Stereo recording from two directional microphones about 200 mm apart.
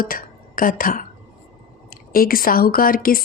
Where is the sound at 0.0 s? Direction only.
45° left (ahead or behind).